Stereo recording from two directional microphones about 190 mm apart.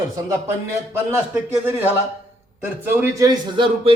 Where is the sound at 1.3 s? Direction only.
10° right (ahead or behind).